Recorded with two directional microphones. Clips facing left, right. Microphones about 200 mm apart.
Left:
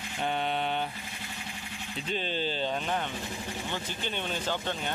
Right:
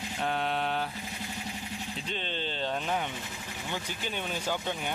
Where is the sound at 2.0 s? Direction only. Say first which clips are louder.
Left 6 dB; 5° left (ahead or behind).